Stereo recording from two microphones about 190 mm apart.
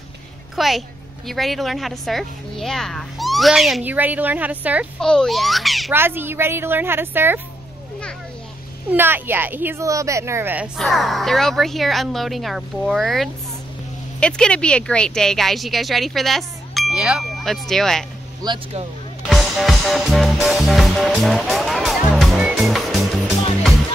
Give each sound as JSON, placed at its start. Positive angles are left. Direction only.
{"t": 0.6, "sound": "a woman's voice", "side_deg": 0}
{"t": 5.0, "sound": "a woman's voice", "side_deg": 5}
{"t": 5.9, "sound": "speech", "side_deg": -10}
{"t": 8.9, "sound": "a woman's voice", "side_deg": -10}
{"t": 18.4, "sound": "speech", "side_deg": -30}
{"t": 19.2, "sound": "music", "side_deg": 0}